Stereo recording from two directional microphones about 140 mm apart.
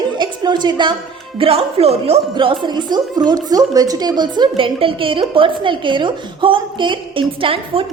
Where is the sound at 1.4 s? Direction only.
45° right (ahead or behind).